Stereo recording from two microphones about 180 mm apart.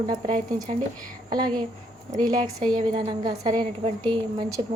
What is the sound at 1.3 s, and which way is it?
Speech, 20° right (ahead or behind).